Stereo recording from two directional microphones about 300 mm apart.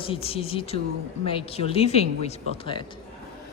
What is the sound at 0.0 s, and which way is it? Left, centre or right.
Speech, centre.